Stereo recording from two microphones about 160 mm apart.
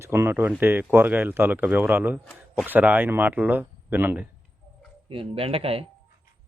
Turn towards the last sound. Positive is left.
turn(degrees=-35)  # may be behind; listen again after turning